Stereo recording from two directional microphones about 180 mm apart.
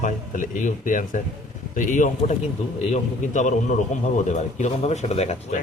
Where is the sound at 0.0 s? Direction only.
45° left (ahead or behind).